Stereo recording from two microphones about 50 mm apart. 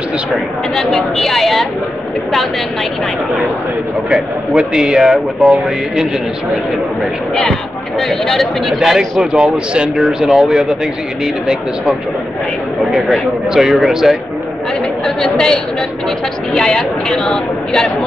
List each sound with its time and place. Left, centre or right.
0.7 s a woman's voice: centre
4.6 s speech: centre
8.1 s a woman's voice: centre
8.7 s speech: centre
12.9 s speech: centre
15.0 s a woman's voice: centre